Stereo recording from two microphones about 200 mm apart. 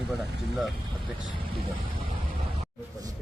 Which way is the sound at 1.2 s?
25° right (ahead or behind).